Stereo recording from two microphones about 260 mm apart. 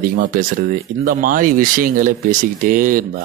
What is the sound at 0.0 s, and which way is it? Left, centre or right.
A man's voice, right.